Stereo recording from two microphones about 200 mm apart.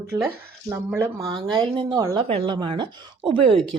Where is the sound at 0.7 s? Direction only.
15° right (ahead or behind).